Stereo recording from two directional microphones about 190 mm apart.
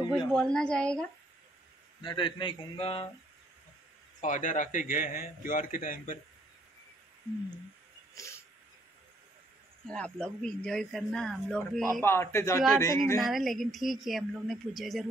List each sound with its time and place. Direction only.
0.3 s speech: 5° left (ahead or behind)
2.0 s speech: 25° left (ahead or behind)
4.2 s a man's voice: 40° left (ahead or behind)
8.2 s dog: 15° left (ahead or behind)
9.8 s a man's voice: 5° left (ahead or behind)
13.2 s speech: centre (ahead or behind)